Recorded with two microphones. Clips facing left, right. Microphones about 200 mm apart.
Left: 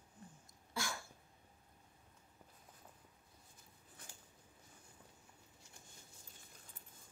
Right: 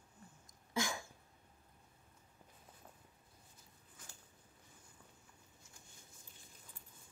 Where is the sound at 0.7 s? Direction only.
15° right (ahead or behind).